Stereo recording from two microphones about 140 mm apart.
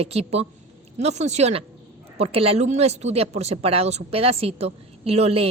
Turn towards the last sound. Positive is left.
turn(degrees=-45)  # may be behind; listen again after turning